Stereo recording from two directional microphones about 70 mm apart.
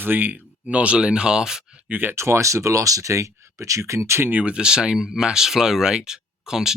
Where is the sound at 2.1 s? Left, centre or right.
Right.